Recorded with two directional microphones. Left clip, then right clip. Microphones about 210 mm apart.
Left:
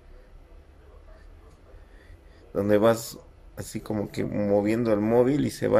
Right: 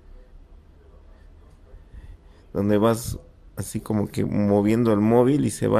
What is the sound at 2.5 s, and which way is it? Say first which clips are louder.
Speech: even; 10° right (ahead or behind).